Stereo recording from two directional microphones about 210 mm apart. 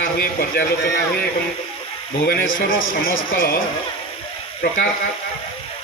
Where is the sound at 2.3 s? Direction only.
45° left (ahead or behind).